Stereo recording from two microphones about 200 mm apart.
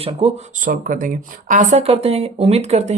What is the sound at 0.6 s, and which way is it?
Speech, 45° right (ahead or behind).